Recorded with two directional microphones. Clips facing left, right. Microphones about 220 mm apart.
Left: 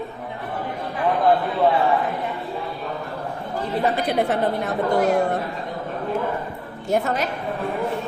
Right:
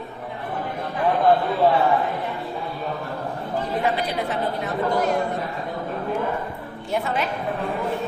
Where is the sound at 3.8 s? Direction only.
50° left (ahead or behind).